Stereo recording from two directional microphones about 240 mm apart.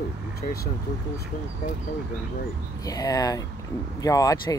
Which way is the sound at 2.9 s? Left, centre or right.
Centre.